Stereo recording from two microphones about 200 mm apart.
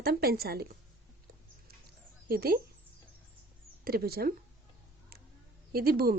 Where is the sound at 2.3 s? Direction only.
50° right (ahead or behind).